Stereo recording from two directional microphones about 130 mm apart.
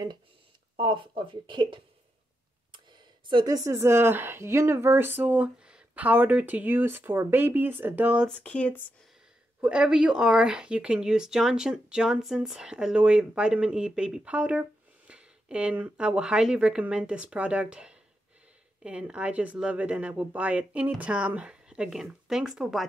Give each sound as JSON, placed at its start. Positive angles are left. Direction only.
{"t": 0.7, "sound": "speech", "side_deg": -40}
{"t": 8.3, "sound": "speech", "side_deg": 10}
{"t": 9.6, "sound": "speech", "side_deg": -5}